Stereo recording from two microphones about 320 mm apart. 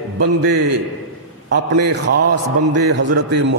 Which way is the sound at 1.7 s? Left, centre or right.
Right.